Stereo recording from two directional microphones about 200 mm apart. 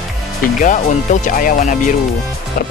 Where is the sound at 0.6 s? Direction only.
40° left (ahead or behind).